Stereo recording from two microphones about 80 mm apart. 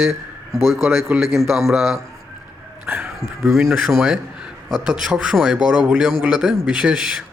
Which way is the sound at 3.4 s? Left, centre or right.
Centre.